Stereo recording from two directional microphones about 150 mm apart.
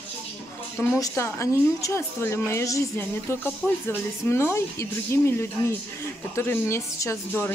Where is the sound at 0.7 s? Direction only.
20° left (ahead or behind).